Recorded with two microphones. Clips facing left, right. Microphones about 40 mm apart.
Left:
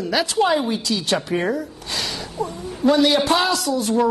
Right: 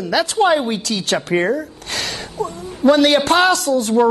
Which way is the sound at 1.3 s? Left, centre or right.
Right.